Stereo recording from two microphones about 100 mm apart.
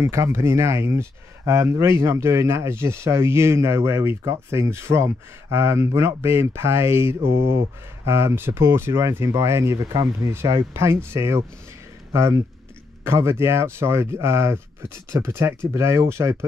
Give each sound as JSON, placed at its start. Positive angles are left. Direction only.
{"t": 0.0, "sound": "speech", "side_deg": -30}